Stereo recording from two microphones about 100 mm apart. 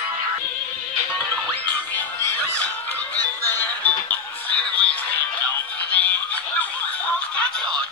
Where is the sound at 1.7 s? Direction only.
25° left (ahead or behind).